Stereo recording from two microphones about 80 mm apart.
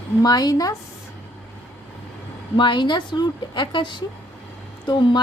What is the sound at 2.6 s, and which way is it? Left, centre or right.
Speech, left.